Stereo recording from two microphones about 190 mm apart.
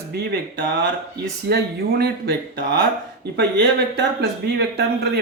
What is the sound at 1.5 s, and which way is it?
Speech, 55° right (ahead or behind).